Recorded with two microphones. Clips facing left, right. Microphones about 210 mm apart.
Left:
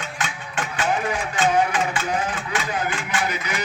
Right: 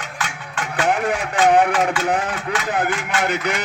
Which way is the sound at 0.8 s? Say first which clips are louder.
Right 4 dB; 70° right (ahead or behind).